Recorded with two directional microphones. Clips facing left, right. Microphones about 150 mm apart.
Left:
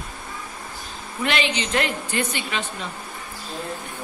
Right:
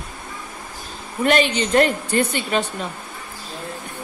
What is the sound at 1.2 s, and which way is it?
A woman's voice, 45° right (ahead or behind).